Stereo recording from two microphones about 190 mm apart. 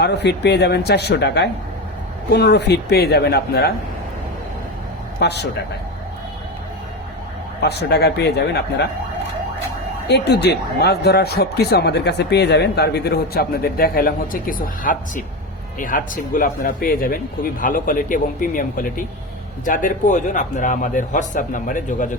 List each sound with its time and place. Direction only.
0.0 s speech: 60° left (ahead or behind)
5.2 s speech: 60° left (ahead or behind)
7.6 s speech: 60° left (ahead or behind)
10.1 s a man's voice: 60° left (ahead or behind); by 22.1 s 45° left (ahead or behind)